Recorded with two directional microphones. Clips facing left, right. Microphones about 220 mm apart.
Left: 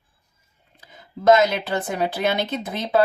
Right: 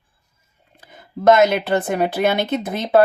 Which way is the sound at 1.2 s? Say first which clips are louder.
Right 3 dB; 55° right (ahead or behind).